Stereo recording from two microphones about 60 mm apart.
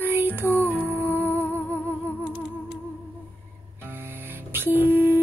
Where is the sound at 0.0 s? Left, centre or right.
Right.